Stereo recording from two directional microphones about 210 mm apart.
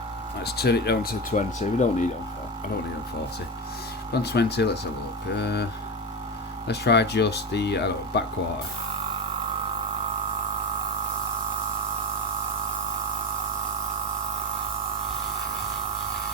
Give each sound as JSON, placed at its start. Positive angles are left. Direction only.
{"t": 0.4, "sound": "speech", "side_deg": 50}
{"t": 1.3, "sound": "speech", "side_deg": 35}
{"t": 4.1, "sound": "speech", "side_deg": 50}
{"t": 6.7, "sound": "speech", "side_deg": 55}